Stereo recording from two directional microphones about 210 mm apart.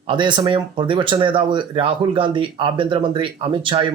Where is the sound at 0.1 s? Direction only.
20° right (ahead or behind).